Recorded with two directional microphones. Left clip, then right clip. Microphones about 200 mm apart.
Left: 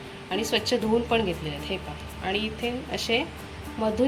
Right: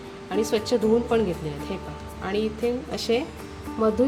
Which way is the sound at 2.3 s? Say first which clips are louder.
Right 3 dB; 45° right (ahead or behind).